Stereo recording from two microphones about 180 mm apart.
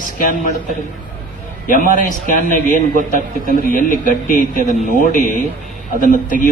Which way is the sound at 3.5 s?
45° left (ahead or behind).